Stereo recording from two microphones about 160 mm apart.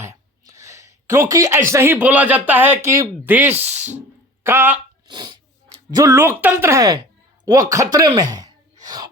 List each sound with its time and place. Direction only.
0.0 s speech: 20° right (ahead or behind)
5.0 s speech: 30° right (ahead or behind)
8.8 s a sound: 25° right (ahead or behind)